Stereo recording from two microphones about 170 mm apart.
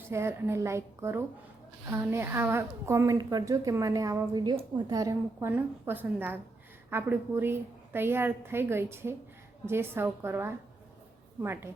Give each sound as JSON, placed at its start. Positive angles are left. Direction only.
{"t": 0.1, "sound": "a woman's voice", "side_deg": -15}